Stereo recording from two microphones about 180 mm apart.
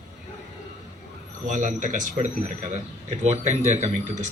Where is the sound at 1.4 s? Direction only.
40° right (ahead or behind).